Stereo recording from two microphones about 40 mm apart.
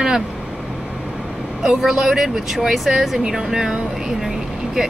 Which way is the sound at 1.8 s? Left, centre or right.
Centre.